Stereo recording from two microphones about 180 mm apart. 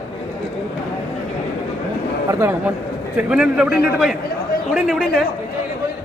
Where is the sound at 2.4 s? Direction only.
10° right (ahead or behind).